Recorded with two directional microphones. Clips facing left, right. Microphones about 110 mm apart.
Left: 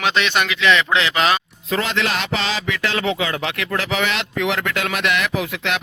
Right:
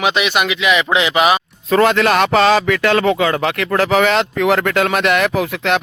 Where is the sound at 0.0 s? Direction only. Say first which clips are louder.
Right 3 dB; 10° right (ahead or behind).